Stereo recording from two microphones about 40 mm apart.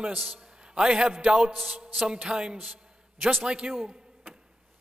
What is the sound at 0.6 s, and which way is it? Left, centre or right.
A man's voice, right.